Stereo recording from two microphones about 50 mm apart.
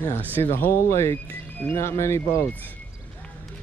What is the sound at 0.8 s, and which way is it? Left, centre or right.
Speech, left.